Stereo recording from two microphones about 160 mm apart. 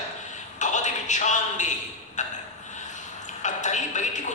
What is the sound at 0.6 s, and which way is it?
A man's voice, 50° left (ahead or behind).